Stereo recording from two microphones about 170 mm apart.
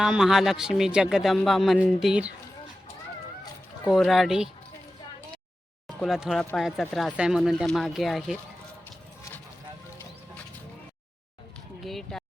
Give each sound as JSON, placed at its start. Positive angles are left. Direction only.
{"t": 0.0, "sound": "speech", "side_deg": -5}
{"t": 3.9, "sound": "speech", "side_deg": 0}
{"t": 6.0, "sound": "speech", "side_deg": -5}
{"t": 11.8, "sound": "speech", "side_deg": 0}